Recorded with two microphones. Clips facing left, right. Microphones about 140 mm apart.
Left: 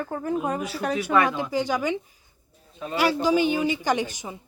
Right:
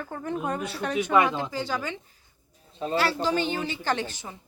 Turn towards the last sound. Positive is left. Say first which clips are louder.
# left 4 dB
turn(degrees=15)  # may be behind; listen again after turning